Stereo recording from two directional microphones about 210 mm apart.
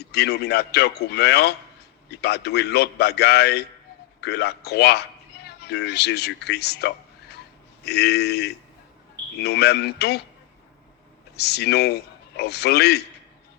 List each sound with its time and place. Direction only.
0.0 s a man's voice: 50° left (ahead or behind)
11.3 s a man's voice: 50° left (ahead or behind)